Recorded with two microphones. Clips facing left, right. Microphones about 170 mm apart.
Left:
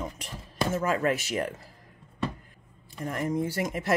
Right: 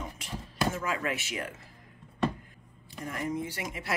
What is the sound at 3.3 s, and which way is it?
Speech, 40° left (ahead or behind).